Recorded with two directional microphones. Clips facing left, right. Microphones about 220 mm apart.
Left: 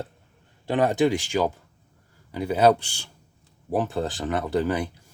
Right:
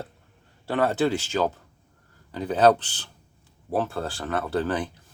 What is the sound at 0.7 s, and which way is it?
Speech, 15° left (ahead or behind).